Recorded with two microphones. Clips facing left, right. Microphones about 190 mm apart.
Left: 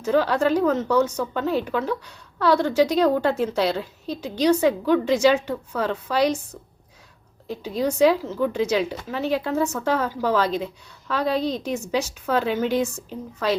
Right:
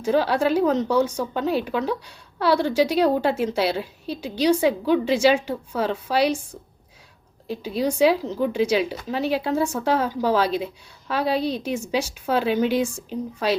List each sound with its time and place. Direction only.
0.0 s a woman's voice: 10° right (ahead or behind)
7.8 s a woman's voice: 10° right (ahead or behind)